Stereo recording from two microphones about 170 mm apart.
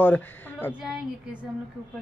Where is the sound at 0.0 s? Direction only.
10° left (ahead or behind).